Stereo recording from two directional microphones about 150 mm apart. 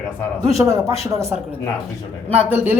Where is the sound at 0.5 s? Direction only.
20° right (ahead or behind).